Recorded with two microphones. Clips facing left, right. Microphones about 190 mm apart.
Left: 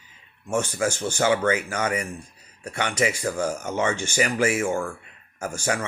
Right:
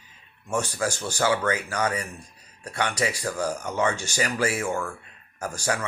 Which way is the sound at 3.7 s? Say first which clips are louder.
Left 1 dB; 25° left (ahead or behind).